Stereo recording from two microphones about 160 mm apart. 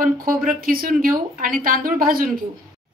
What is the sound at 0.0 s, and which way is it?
A woman's voice, 60° right (ahead or behind).